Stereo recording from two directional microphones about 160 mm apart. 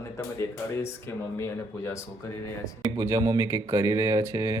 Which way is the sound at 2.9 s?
20° right (ahead or behind).